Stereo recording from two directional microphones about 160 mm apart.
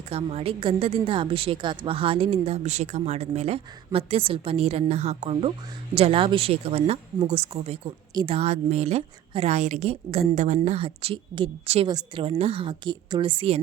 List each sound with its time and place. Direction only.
0.1 s a woman's voice: 40° right (ahead or behind)
8.1 s a woman's voice: 30° right (ahead or behind)
8.4 s a woman's voice: 40° right (ahead or behind)